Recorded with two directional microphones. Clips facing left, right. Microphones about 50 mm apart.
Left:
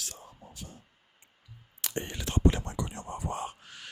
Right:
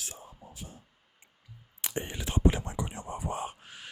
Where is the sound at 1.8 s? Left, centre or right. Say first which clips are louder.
Even; centre.